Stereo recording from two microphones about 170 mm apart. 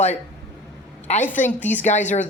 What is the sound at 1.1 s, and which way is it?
Speech, 40° left (ahead or behind).